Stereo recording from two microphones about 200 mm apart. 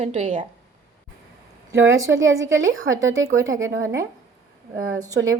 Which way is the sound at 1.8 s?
75° right (ahead or behind).